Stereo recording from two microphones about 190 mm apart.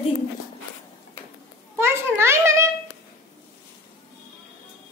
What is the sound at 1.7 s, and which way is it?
Speech, 10° right (ahead or behind).